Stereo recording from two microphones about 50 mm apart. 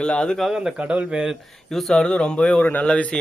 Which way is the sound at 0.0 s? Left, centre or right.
Centre.